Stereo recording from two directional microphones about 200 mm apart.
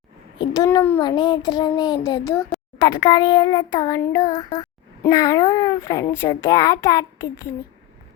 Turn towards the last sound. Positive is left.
turn(degrees=15)  # may be behind; listen again after turning